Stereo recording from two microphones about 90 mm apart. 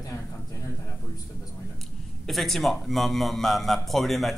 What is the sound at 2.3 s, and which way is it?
Speech, centre (ahead or behind).